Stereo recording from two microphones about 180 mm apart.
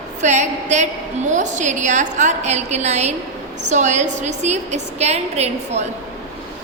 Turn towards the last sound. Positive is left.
turn(degrees=-35)  # may be behind; listen again after turning